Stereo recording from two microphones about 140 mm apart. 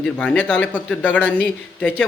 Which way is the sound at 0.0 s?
10° left (ahead or behind).